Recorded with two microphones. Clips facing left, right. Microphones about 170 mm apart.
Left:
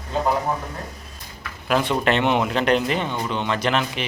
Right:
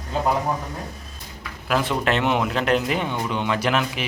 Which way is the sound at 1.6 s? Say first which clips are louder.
Left 2 dB; centre (ahead or behind).